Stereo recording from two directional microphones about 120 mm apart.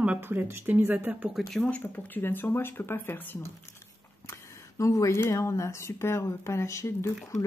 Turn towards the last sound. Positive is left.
turn(degrees=25)  # may be behind; listen again after turning